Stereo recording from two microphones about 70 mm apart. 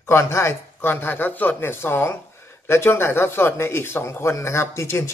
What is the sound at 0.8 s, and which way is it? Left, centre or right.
A man's voice, left.